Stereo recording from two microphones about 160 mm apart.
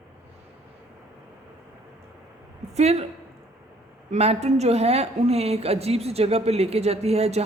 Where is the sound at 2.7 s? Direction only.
40° right (ahead or behind).